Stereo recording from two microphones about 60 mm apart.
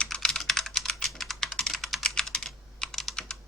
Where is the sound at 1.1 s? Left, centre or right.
Centre.